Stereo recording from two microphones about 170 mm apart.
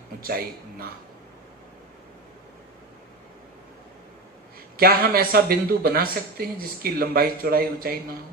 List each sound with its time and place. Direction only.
0.2 s a man's voice: 60° right (ahead or behind)
4.7 s speech: 65° right (ahead or behind)